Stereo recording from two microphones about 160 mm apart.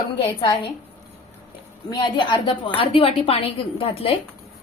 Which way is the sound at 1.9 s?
30° left (ahead or behind).